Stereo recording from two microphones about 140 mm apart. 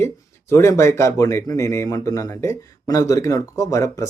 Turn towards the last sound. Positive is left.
turn(degrees=25)  # may be behind; listen again after turning